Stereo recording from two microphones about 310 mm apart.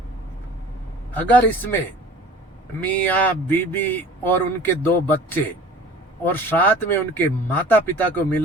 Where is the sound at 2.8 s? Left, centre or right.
Centre.